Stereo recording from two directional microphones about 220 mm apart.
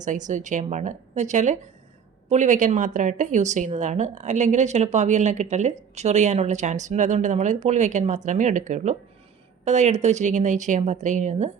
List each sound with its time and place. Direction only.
0.0 s a woman's voice: 35° right (ahead or behind)